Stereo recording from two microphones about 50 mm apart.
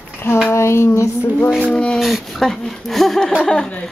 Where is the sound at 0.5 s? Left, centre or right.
Left.